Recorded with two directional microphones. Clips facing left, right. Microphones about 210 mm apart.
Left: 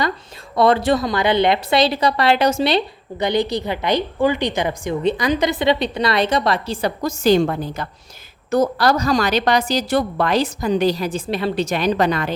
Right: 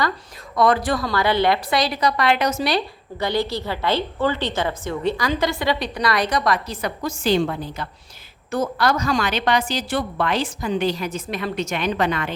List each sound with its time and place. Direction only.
0.5 s a woman's voice: 25° left (ahead or behind)